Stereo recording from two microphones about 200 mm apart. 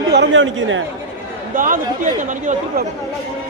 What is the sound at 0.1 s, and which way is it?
Speech, 65° right (ahead or behind).